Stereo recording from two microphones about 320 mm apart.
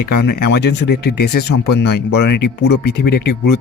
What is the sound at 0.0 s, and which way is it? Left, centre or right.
Speech, left.